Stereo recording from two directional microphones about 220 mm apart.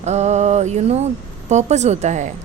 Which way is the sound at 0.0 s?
30° right (ahead or behind).